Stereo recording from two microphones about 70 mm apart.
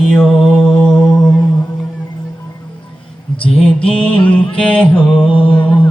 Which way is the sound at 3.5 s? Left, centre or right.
Centre.